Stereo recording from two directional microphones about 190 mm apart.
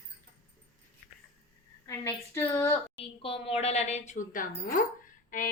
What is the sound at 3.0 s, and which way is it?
Speech, 30° left (ahead or behind).